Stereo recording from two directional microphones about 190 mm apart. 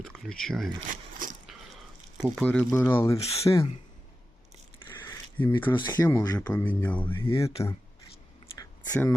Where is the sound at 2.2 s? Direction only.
5° left (ahead or behind).